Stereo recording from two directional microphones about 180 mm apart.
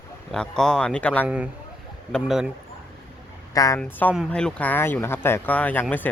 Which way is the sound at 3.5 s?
20° left (ahead or behind).